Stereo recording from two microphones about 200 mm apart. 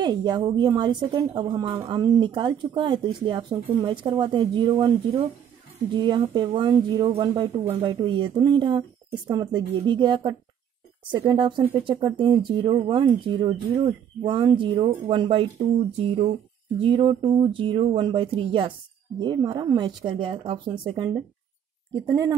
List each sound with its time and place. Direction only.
0.0 s speech: 20° right (ahead or behind)